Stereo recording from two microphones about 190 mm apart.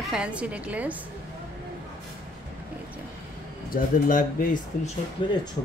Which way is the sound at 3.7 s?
45° left (ahead or behind).